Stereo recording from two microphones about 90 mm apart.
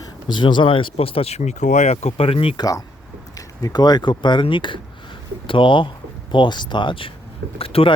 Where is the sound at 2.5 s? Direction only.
45° left (ahead or behind); by 7.1 s 70° left (ahead or behind).